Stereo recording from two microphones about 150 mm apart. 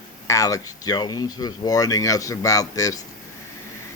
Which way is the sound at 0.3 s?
20° left (ahead or behind).